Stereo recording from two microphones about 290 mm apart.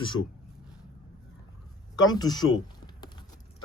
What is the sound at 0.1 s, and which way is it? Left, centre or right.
Speech, left.